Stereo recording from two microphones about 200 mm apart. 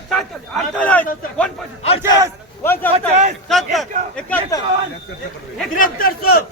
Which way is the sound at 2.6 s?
10° left (ahead or behind).